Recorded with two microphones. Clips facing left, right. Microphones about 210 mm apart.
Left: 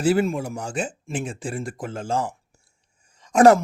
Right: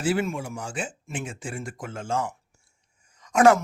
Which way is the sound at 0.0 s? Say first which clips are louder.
Left 5 dB; 40° left (ahead or behind).